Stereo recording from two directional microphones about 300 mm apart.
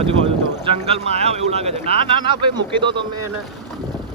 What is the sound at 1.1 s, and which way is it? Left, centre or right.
Speech, right.